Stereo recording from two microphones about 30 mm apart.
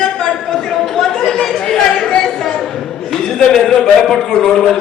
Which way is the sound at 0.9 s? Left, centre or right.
Left.